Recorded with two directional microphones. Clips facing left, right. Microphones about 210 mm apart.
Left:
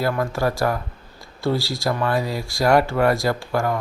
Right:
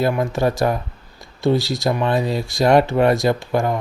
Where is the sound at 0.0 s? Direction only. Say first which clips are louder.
Right 3 dB; 20° right (ahead or behind).